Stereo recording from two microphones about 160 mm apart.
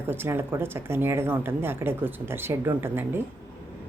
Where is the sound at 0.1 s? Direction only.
15° right (ahead or behind).